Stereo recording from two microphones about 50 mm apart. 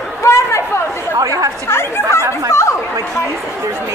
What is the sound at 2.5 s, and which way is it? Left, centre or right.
Chatter, left.